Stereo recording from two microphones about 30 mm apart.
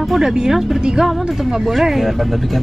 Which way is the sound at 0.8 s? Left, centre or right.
Right.